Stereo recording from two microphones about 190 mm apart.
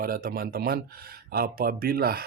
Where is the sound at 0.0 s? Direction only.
50° right (ahead or behind).